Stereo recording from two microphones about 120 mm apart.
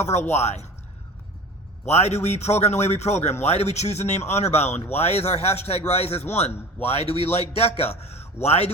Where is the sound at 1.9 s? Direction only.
65° left (ahead or behind).